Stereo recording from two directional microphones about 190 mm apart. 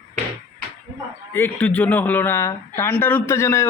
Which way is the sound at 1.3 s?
10° left (ahead or behind).